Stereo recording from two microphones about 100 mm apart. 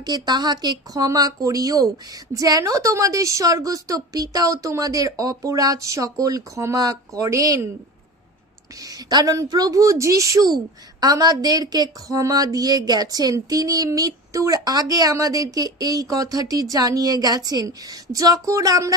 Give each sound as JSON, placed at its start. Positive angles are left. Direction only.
{"t": 0.0, "sound": "a woman's voice", "side_deg": -45}
{"t": 8.8, "sound": "a woman's voice", "side_deg": -40}